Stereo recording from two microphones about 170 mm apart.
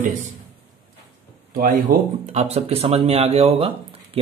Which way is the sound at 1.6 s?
55° right (ahead or behind).